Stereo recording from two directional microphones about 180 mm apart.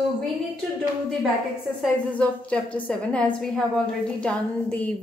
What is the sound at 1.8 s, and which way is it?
A woman's voice, 5° left (ahead or behind).